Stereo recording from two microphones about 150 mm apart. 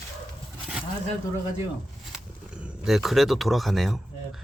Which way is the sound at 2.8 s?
Centre (ahead or behind).